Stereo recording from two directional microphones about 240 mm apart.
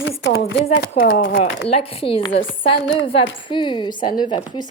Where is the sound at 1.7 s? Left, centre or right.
Left.